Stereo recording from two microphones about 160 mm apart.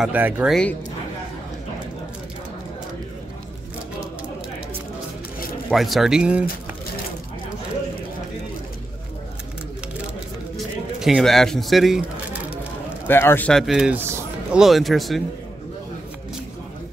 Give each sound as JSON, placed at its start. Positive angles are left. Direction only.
{"t": 0.0, "sound": "speech", "side_deg": -10}
{"t": 5.7, "sound": "speech", "side_deg": 0}
{"t": 11.0, "sound": "speech", "side_deg": 0}
{"t": 13.0, "sound": "a man's voice", "side_deg": 15}
{"t": 13.5, "sound": "speech", "side_deg": 0}
{"t": 14.6, "sound": "speech", "side_deg": 0}